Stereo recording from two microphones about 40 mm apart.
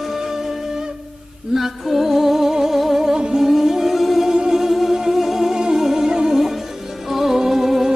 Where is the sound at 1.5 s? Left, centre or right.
Centre.